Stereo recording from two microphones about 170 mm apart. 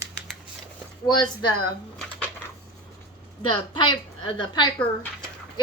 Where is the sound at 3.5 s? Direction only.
30° left (ahead or behind).